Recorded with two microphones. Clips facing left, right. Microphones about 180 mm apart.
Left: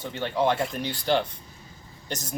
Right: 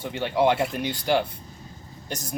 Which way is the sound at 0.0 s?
15° right (ahead or behind).